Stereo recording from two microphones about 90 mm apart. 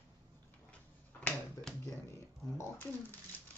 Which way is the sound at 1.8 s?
30° left (ahead or behind).